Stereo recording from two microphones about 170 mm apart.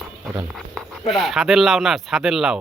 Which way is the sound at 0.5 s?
Centre (ahead or behind).